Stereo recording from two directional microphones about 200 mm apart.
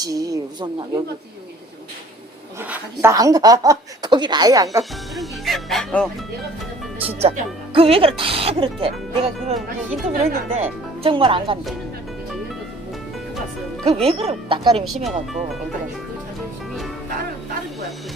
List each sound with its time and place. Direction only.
0.0 s speech: 15° right (ahead or behind)
2.6 s speech: 10° right (ahead or behind)
4.8 s speech: centre (ahead or behind)
7.2 s speech: 30° right (ahead or behind)
13.8 s speech: 30° right (ahead or behind)
14.8 s speech: centre (ahead or behind)